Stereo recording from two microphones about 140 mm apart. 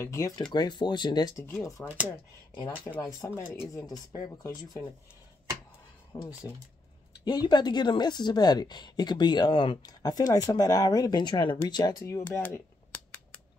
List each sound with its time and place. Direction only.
0.0 s speech: 20° left (ahead or behind)
0.4 s a woman's voice: 30° left (ahead or behind)
1.4 s speech: 20° left (ahead or behind)
3.2 s speech: 20° left (ahead or behind)
6.1 s a woman's voice: 25° left (ahead or behind)
12.3 s a sound: 10° left (ahead or behind)